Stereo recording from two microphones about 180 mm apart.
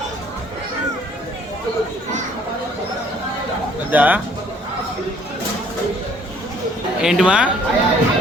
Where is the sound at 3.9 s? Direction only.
10° right (ahead or behind).